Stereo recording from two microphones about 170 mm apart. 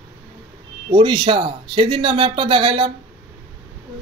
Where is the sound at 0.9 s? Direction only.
25° right (ahead or behind).